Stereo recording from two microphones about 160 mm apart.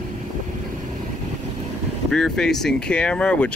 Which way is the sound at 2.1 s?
5° left (ahead or behind).